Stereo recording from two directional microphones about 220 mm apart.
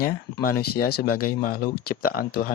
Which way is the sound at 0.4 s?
45° left (ahead or behind).